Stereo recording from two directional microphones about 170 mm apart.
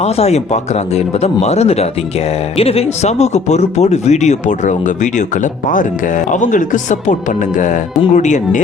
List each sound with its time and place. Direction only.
0.0 s speech: 40° left (ahead or behind)